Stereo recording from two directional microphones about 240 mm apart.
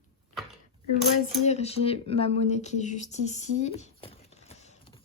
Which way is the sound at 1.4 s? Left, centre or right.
Left.